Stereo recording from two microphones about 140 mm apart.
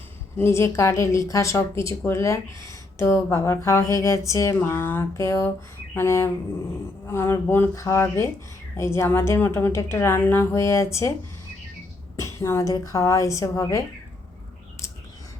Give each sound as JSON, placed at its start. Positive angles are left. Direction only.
{"t": 0.3, "sound": "a woman's voice", "side_deg": 20}
{"t": 12.1, "sound": "a woman's voice", "side_deg": 20}